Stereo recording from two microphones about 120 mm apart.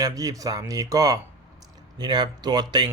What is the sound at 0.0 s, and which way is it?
A man's voice, 30° right (ahead or behind).